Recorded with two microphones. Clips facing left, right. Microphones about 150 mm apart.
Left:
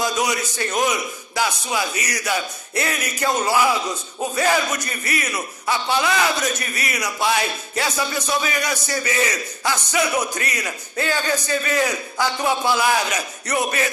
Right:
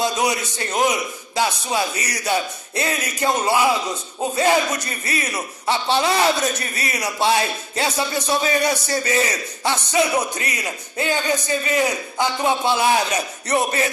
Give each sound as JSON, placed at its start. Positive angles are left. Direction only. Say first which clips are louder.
{"t": 0.0, "sound": "a man's voice", "louder": "right 1 dB", "side_deg": -25}